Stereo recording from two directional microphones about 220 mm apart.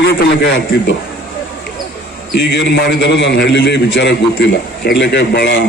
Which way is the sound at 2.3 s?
50° left (ahead or behind).